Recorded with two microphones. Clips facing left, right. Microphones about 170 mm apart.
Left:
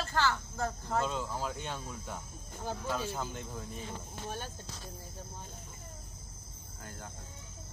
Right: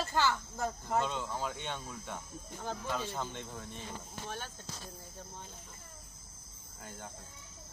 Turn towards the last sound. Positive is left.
turn(degrees=0)  # may be behind; listen again after turning